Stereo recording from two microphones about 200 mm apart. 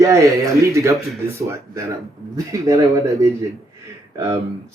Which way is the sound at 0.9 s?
Centre (ahead or behind).